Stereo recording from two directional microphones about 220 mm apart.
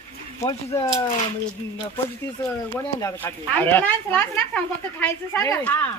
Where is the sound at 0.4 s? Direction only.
15° left (ahead or behind).